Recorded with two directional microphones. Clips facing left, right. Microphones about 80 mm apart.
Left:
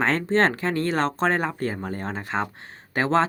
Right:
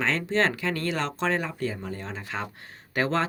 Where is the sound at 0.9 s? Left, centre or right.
Left.